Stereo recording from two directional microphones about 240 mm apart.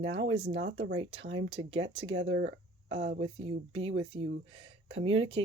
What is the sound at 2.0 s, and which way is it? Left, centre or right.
Speech, right.